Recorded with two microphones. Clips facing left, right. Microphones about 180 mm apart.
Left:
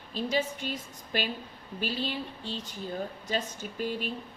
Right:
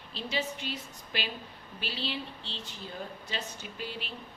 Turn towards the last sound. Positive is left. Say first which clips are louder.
# left 7 dB
turn(degrees=45)  # may be behind; listen again after turning